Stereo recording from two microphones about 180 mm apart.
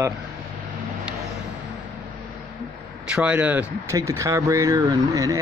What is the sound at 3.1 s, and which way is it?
Speech, 5° right (ahead or behind).